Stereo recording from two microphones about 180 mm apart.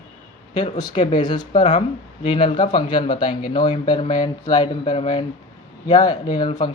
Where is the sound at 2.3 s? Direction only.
25° left (ahead or behind).